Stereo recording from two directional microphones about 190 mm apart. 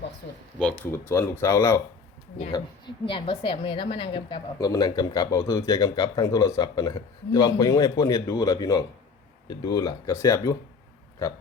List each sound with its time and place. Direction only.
0.6 s a woman's voice: 10° left (ahead or behind)